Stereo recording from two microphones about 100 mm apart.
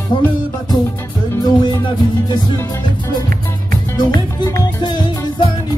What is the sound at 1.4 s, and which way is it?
Music, 45° left (ahead or behind).